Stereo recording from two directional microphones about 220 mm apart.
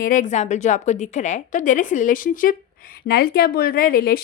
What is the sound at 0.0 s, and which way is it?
A woman's voice, 35° left (ahead or behind).